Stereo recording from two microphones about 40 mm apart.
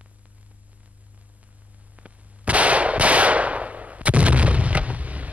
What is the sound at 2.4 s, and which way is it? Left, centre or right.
Gunshot, right.